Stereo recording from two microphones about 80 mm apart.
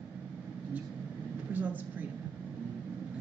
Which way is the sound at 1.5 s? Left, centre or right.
Right.